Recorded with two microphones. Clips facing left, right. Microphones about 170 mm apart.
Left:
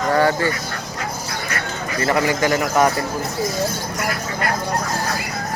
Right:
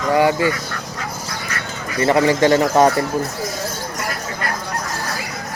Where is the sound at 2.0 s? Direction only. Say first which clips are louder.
Right 5 dB; 25° right (ahead or behind).